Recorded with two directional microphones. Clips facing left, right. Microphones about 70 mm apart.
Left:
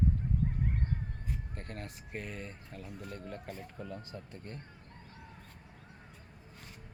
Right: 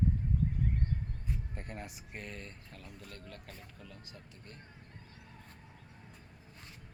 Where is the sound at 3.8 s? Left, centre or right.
Left.